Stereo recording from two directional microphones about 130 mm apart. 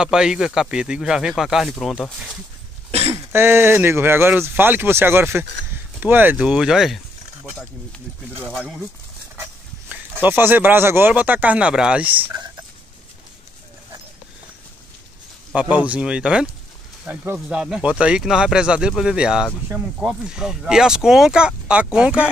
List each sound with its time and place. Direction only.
0.0 s speech: 5° right (ahead or behind)
2.9 s a sound: 50° right (ahead or behind)
3.3 s speech: 20° right (ahead or behind); by 7.0 s 5° right (ahead or behind)
8.5 s speech: 5° right (ahead or behind)
9.9 s a sound: 15° right (ahead or behind)
10.2 s speech: 15° right (ahead or behind)
15.5 s speech: 10° right (ahead or behind)